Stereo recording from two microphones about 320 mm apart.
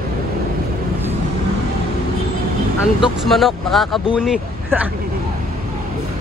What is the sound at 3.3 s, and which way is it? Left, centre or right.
Speech, centre.